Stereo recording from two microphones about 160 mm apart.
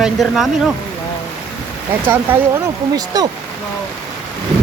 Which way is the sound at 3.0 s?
25° right (ahead or behind).